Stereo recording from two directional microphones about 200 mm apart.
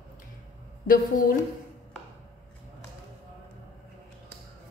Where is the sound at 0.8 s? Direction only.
45° left (ahead or behind).